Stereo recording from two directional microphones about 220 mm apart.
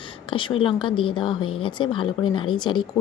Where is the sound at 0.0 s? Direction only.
20° left (ahead or behind).